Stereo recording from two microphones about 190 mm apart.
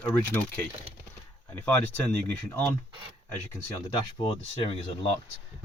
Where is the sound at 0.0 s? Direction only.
10° left (ahead or behind).